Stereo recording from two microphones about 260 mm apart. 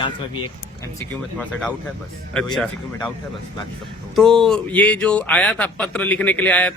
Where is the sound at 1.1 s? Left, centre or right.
Centre.